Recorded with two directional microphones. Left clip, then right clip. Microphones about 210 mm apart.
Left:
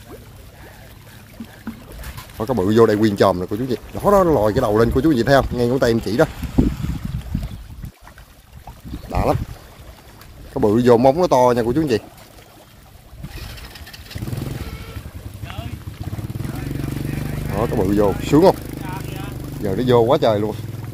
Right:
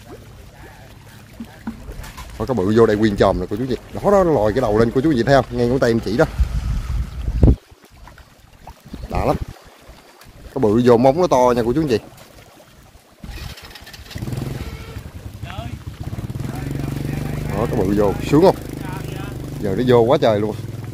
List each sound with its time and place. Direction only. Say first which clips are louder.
2.3 s speech: even; 5° left (ahead or behind)
9.1 s boat: even; 5° right (ahead or behind)
10.5 s speech: even; centre (ahead or behind)
13.3 s vehicle: right 1 dB; 30° right (ahead or behind)
16.4 s vehicle: right 1 dB; 30° right (ahead or behind)
17.8 s speech: even; centre (ahead or behind)
18.6 s vehicle: even; 35° right (ahead or behind)
19.6 s speech: right 1 dB; 10° right (ahead or behind)